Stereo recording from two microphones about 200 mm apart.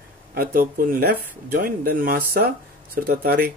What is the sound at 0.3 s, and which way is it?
Speech, 45° right (ahead or behind).